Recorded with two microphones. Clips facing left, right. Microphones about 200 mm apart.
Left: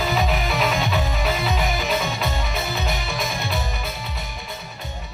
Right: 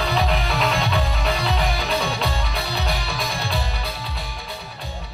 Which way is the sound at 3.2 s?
20° left (ahead or behind).